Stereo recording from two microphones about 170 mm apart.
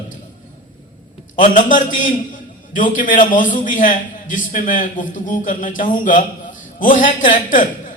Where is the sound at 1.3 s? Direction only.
50° left (ahead or behind).